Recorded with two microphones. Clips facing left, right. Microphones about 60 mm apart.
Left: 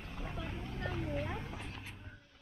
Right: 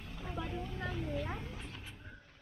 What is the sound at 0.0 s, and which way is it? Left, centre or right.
Vehicle, left.